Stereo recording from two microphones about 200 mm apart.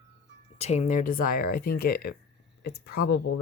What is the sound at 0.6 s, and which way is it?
Speech, 35° left (ahead or behind).